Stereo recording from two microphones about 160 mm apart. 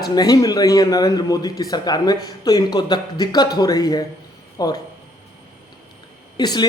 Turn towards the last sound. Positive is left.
turn(degrees=25)  # may be behind; listen again after turning